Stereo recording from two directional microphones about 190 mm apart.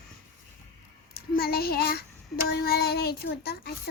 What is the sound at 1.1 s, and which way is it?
Speech, 55° left (ahead or behind).